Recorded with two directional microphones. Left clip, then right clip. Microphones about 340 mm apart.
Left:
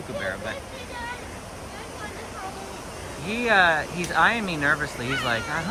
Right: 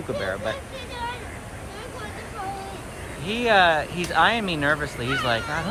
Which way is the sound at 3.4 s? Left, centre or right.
Centre.